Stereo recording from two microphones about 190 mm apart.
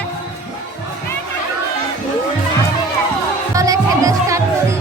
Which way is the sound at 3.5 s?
15° right (ahead or behind).